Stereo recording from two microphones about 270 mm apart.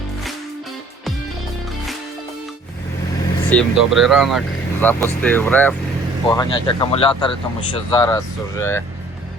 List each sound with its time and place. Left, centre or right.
3.5 s speech: centre